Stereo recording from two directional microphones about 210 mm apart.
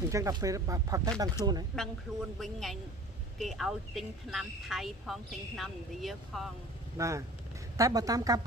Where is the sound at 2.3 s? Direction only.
Centre (ahead or behind).